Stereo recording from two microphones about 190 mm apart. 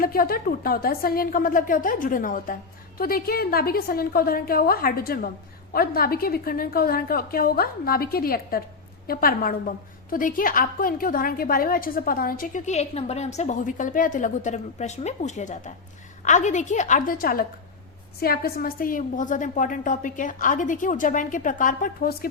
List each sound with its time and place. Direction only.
0.0 s a woman's voice: 50° left (ahead or behind)